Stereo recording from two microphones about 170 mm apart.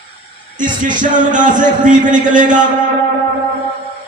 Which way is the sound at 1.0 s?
50° right (ahead or behind).